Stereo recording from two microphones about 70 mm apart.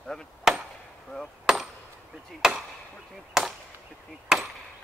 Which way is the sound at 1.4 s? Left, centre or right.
Centre.